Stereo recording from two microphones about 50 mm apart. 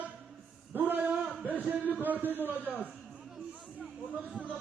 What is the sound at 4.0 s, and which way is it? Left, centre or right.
Speech, right.